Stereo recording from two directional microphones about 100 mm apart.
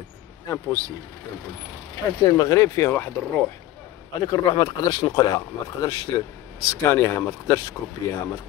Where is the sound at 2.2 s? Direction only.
35° left (ahead or behind).